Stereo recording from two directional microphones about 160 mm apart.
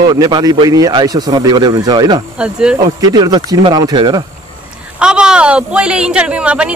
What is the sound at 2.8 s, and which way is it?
Speech, 25° right (ahead or behind).